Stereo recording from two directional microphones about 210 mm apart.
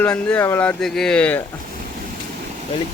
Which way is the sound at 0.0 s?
5° left (ahead or behind).